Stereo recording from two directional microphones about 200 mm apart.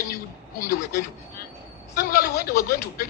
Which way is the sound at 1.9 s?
50° left (ahead or behind).